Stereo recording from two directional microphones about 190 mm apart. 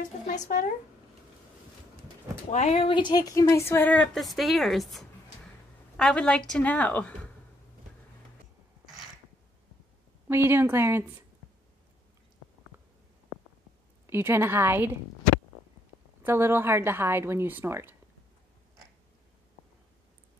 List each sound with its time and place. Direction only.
0.3 s speech: 40° left (ahead or behind)
2.5 s a woman's voice: 35° left (ahead or behind); by 7.2 s 10° left (ahead or behind)
10.2 s a woman's voice: 10° right (ahead or behind)
14.0 s a woman's voice: 15° right (ahead or behind)
16.2 s a woman's voice: 10° right (ahead or behind)